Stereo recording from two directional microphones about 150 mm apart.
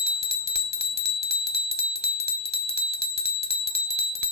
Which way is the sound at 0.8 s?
40° left (ahead or behind).